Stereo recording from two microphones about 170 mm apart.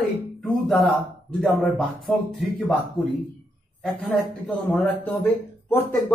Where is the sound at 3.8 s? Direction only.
5° left (ahead or behind).